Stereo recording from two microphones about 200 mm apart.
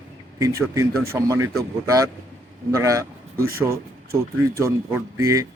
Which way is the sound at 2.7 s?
15° right (ahead or behind).